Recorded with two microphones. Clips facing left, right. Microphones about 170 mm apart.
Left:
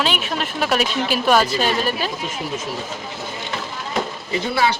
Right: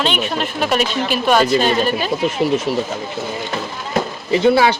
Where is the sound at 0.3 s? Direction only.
Centre (ahead or behind).